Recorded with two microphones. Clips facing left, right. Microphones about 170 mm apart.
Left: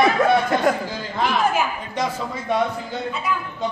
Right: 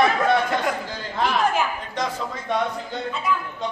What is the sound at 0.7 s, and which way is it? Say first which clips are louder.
Speech: left 6 dB; 45° left (ahead or behind).